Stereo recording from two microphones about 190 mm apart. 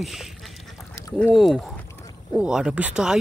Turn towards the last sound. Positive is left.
turn(degrees=-5)  # may be behind; listen again after turning